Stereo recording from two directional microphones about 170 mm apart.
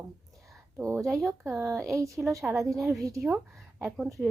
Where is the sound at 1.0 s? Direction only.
Centre (ahead or behind).